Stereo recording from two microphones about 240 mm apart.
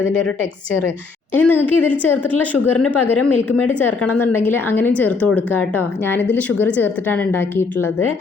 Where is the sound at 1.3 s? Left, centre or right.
Centre.